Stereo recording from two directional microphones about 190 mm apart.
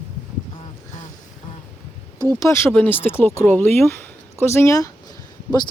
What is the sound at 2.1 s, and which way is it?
Speech, 15° right (ahead or behind).